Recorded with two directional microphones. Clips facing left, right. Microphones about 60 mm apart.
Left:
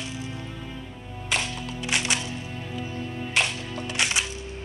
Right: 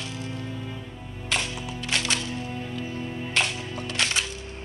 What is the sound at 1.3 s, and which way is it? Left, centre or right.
Music, centre.